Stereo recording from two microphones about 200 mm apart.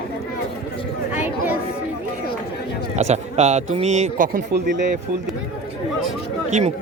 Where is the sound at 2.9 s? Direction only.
35° right (ahead or behind).